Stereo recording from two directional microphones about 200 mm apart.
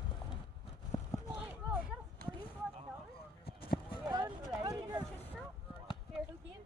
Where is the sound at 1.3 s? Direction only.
5° right (ahead or behind).